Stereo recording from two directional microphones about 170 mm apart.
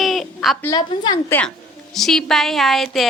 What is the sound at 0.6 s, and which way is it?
Speech, 25° left (ahead or behind).